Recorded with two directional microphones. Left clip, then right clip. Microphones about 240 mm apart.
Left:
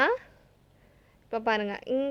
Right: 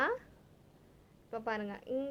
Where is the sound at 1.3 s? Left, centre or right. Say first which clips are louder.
Left 10 dB; left.